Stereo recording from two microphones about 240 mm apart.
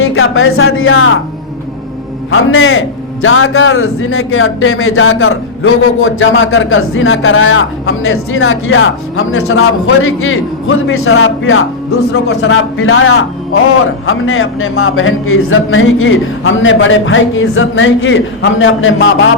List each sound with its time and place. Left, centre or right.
0.0 s a man's voice: left
2.3 s a man's voice: left
12.1 s a man's voice: left